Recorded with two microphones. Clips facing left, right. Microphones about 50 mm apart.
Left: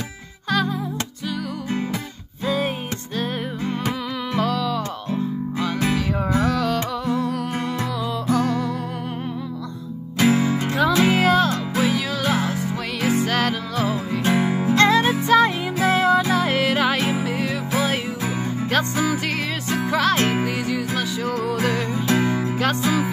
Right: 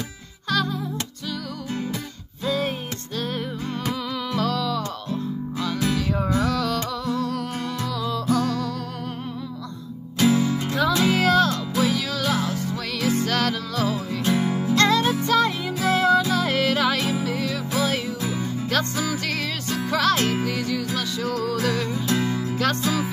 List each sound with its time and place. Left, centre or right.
0.5 s music: centre
2.4 s music: centre
5.6 s music: left
10.1 s music: left
14.2 s music: left
14.8 s music: left
21.9 s music: left